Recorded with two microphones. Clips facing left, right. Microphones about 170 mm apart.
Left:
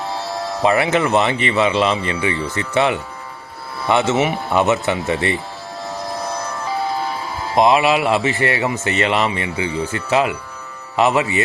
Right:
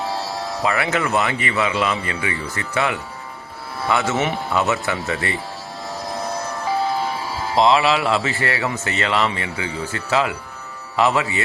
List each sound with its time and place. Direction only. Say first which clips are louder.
0.6 s speech: left 6 dB; 25° left (ahead or behind)
7.5 s speech: left 2 dB; 20° left (ahead or behind)